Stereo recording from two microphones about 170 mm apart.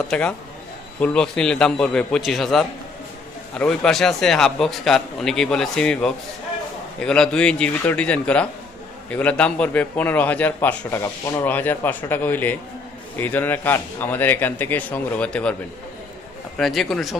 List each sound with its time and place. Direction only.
0.1 s a man's voice: 5° left (ahead or behind)
16.6 s speech: centre (ahead or behind)